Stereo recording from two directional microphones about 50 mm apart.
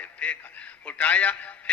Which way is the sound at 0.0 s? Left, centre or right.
Left.